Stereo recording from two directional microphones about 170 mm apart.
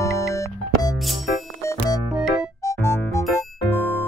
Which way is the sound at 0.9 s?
Centre (ahead or behind).